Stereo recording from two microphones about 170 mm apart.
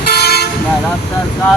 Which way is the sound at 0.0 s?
70° left (ahead or behind).